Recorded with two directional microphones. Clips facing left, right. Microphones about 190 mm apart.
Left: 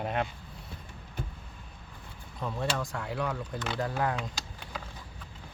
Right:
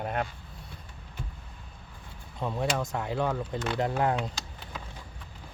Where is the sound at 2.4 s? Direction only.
15° right (ahead or behind).